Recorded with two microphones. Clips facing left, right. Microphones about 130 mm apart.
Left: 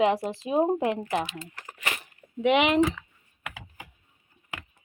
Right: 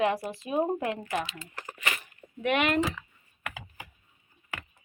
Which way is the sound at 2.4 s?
15° left (ahead or behind).